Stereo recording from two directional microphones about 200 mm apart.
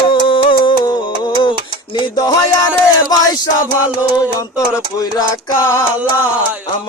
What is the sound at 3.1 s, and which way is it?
Music, 20° left (ahead or behind).